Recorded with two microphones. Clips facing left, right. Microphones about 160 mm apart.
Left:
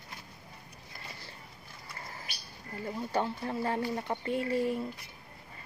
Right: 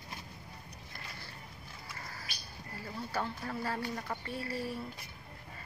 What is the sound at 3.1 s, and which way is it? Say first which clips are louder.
Speech: left 5 dB; 25° left (ahead or behind).